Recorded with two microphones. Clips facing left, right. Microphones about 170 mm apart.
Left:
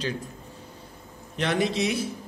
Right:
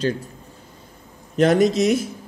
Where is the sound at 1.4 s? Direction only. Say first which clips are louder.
Right 9 dB; 45° right (ahead or behind).